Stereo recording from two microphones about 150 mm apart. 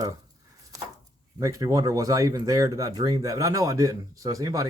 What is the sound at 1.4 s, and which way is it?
Speech, 20° right (ahead or behind).